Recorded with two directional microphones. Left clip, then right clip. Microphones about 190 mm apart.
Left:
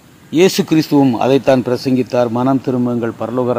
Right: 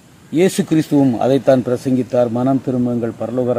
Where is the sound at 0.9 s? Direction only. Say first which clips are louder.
Left 2 dB; 10° left (ahead or behind).